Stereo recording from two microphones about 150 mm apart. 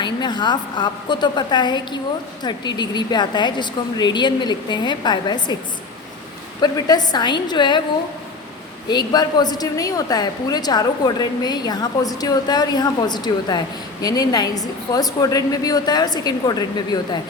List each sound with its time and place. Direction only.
0.0 s a woman's voice: 30° left (ahead or behind)
6.6 s a woman's voice: 25° left (ahead or behind)
8.9 s a woman's voice: 25° left (ahead or behind)